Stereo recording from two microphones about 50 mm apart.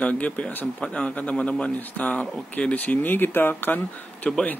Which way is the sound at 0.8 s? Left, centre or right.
Left.